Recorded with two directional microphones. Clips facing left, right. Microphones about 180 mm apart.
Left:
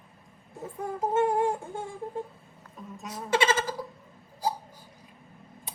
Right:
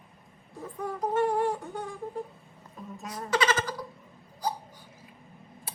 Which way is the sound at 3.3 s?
25° left (ahead or behind).